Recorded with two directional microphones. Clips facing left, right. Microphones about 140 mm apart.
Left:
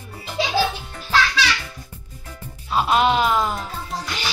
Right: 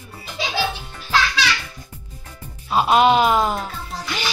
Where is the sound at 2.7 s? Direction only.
10° right (ahead or behind).